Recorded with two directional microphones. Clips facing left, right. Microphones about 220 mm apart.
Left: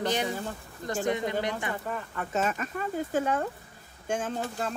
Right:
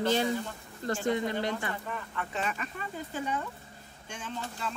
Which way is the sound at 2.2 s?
45° left (ahead or behind).